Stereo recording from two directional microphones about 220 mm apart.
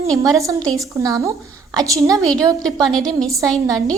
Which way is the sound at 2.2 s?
5° left (ahead or behind).